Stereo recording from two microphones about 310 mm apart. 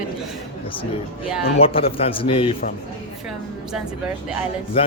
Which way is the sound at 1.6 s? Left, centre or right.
Centre.